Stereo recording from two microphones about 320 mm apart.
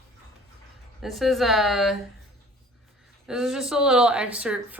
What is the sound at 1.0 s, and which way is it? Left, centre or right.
Speech, centre.